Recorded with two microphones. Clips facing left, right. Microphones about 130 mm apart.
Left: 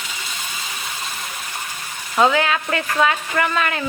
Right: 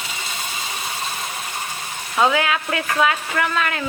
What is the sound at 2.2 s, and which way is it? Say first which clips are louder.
Speech: left 2 dB; 5° right (ahead or behind).